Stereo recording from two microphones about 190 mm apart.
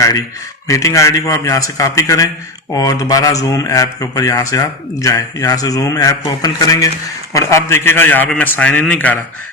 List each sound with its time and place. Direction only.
0.7 s speech: 15° left (ahead or behind)